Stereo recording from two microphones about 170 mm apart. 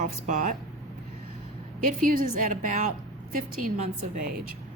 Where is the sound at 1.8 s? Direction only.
55° right (ahead or behind).